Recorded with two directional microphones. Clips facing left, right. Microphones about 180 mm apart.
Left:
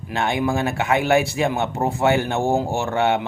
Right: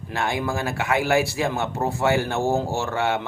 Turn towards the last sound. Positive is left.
turn(degrees=20)  # may be behind; listen again after turning